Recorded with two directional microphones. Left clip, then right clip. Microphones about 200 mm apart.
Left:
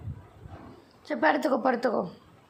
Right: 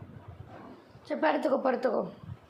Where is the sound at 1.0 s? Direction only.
25° left (ahead or behind).